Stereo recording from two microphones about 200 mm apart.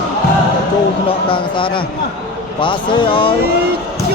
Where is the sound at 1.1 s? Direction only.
25° left (ahead or behind).